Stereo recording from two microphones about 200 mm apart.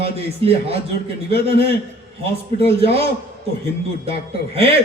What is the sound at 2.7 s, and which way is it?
Speech, 30° right (ahead or behind).